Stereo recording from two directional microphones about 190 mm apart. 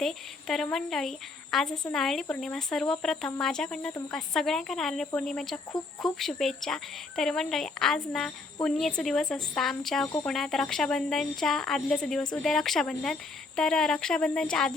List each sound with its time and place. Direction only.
0.0 s speech: centre (ahead or behind)